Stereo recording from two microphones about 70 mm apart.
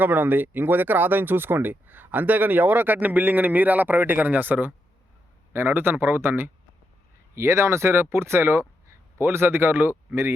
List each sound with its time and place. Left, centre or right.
0.0 s speech: right